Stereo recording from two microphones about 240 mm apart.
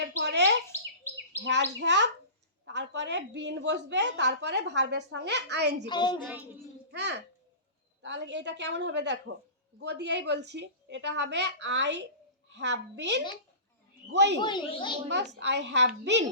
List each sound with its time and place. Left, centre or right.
0.2 s chirp: right
1.4 s a woman's voice: right
5.9 s speech: centre
6.2 s a child's voice: centre
6.9 s a woman's voice: right
14.4 s speech: centre
15.1 s a woman's voice: right